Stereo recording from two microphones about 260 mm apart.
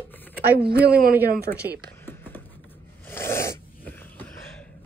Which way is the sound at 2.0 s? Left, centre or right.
Centre.